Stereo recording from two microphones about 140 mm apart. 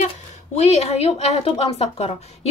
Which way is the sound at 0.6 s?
50° left (ahead or behind).